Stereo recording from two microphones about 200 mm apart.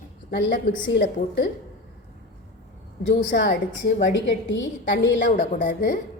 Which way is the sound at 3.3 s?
55° left (ahead or behind).